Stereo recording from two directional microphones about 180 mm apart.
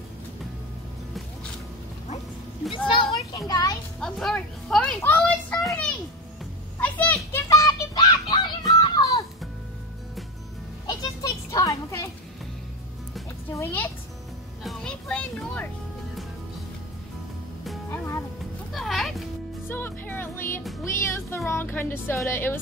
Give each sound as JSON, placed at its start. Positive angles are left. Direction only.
{"t": 2.9, "sound": "child singing", "side_deg": 20}
{"t": 4.0, "sound": "children playing", "side_deg": 0}
{"t": 6.8, "sound": "a sound", "side_deg": 10}
{"t": 10.9, "sound": "children playing", "side_deg": 20}
{"t": 13.5, "sound": "music", "side_deg": 15}
{"t": 14.6, "sound": "music", "side_deg": 0}
{"t": 17.8, "sound": "music", "side_deg": 15}
{"t": 18.7, "sound": "music", "side_deg": 0}
{"t": 19.7, "sound": "music", "side_deg": 10}